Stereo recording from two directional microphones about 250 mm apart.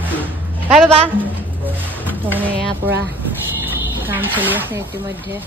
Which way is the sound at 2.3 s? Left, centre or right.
Centre.